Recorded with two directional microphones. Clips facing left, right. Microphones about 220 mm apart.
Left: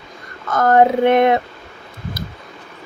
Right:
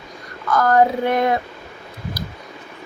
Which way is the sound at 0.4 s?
25° left (ahead or behind).